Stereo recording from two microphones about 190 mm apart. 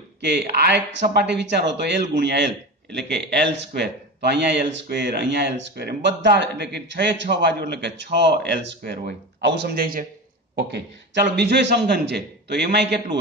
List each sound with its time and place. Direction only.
0.2 s speech: 65° right (ahead or behind)
10.5 s speech: 60° right (ahead or behind)